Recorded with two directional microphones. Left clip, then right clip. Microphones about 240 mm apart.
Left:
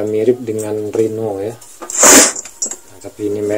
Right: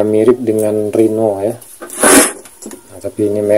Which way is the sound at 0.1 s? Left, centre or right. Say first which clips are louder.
Right 4 dB; right.